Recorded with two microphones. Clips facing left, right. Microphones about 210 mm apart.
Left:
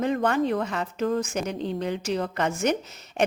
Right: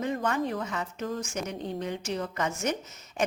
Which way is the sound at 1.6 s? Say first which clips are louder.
Left 5 dB; 80° left.